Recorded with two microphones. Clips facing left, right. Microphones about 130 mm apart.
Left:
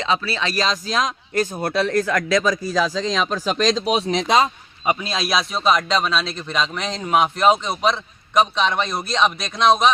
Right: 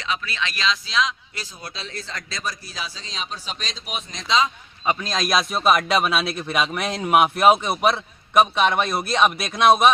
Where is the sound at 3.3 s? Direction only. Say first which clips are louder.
Left 11 dB; 45° left (ahead or behind).